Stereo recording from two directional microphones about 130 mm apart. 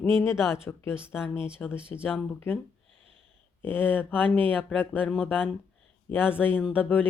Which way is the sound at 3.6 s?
15° left (ahead or behind).